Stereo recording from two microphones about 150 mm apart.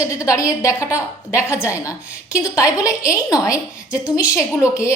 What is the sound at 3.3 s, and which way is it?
A woman's voice, 20° left (ahead or behind).